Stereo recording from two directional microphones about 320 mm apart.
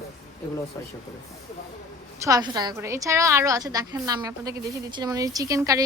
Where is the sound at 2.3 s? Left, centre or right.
Centre.